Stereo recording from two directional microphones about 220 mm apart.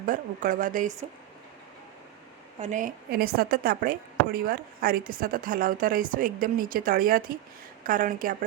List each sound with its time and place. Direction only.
0.0 s speech: 40° right (ahead or behind)
2.6 s speech: 35° right (ahead or behind)